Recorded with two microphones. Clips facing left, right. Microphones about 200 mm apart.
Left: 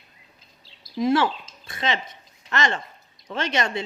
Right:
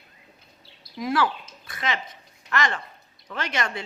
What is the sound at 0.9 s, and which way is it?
A woman's voice, 25° left (ahead or behind).